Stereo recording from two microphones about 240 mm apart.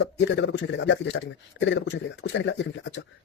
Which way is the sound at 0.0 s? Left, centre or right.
Left.